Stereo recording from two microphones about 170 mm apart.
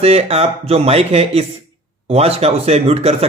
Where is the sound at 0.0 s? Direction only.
35° right (ahead or behind).